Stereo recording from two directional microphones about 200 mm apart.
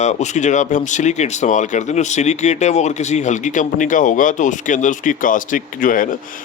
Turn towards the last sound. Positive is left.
turn(degrees=40)  # may be behind; listen again after turning